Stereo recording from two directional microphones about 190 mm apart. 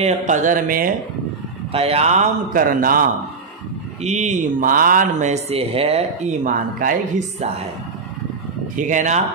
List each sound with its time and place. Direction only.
0.0 s a sound: 40° right (ahead or behind)
1.7 s speech: 30° right (ahead or behind); by 3.1 s 50° right (ahead or behind)
4.0 s speech: 35° right (ahead or behind)
8.7 s speech: 40° right (ahead or behind)